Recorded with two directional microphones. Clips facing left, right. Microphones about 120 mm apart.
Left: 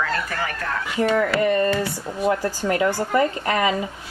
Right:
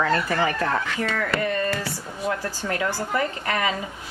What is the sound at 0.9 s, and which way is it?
A woman's voice, 25° left (ahead or behind).